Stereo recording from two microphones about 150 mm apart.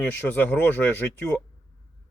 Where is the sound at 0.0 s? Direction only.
10° left (ahead or behind).